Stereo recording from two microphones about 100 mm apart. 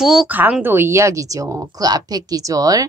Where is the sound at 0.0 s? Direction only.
5° right (ahead or behind).